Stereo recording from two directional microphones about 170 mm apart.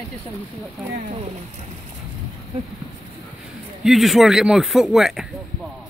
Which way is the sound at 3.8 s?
Centre (ahead or behind).